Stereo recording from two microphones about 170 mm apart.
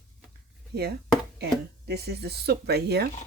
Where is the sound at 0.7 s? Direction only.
70° right (ahead or behind).